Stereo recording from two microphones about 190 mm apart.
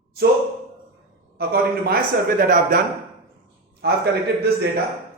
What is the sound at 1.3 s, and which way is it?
A man's voice, 55° right (ahead or behind).